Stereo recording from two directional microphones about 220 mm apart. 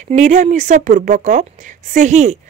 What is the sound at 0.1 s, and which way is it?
Speech, 30° right (ahead or behind).